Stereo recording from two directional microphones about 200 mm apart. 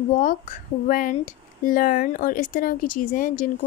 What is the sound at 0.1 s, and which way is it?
Speech, 40° left (ahead or behind).